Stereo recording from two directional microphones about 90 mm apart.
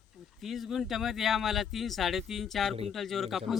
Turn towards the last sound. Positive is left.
turn(degrees=0)  # may be behind; listen again after turning